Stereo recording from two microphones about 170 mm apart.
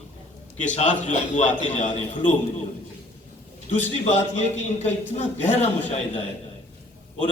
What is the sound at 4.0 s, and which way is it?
A man's voice, 40° left (ahead or behind).